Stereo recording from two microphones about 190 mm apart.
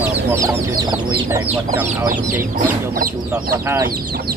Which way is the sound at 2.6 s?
50° right (ahead or behind).